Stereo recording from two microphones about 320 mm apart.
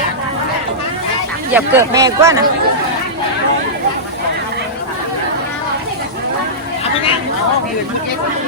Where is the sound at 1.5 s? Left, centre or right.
Centre.